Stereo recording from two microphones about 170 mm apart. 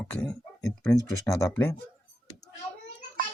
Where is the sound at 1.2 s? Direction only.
15° left (ahead or behind).